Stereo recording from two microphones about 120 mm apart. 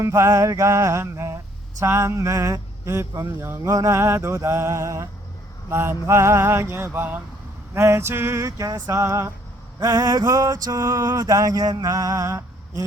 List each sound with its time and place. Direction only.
0.0 s speech: 20° right (ahead or behind)